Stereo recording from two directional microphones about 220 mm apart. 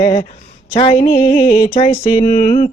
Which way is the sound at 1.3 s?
40° left (ahead or behind).